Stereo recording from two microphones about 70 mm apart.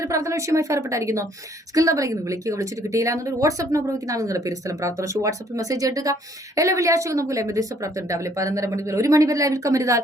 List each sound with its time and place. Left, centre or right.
0.0 s speech: right